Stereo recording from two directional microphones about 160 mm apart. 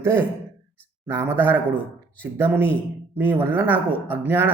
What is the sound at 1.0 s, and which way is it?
Speech, 15° right (ahead or behind).